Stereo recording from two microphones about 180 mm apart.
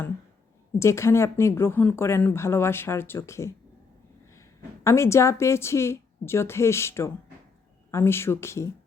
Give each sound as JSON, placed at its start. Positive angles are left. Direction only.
{"t": 0.8, "sound": "speech", "side_deg": 15}
{"t": 4.8, "sound": "speech", "side_deg": 15}